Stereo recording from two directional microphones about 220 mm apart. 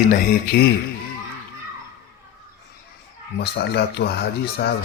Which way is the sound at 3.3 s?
50° left (ahead or behind).